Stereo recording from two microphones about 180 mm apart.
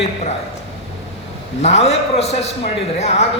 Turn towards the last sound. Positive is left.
turn(degrees=35)  # may be behind; listen again after turning